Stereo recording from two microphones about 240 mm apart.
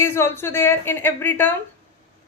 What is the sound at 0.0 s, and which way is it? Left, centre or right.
A woman's voice, centre.